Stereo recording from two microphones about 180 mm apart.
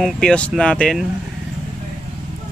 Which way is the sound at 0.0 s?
5° left (ahead or behind).